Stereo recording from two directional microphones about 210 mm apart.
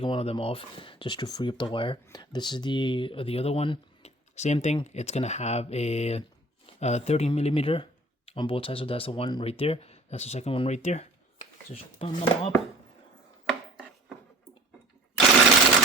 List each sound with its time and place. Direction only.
0.0 s speech: 25° left (ahead or behind)